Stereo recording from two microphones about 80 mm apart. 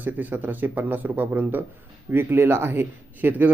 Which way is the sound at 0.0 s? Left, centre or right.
Right.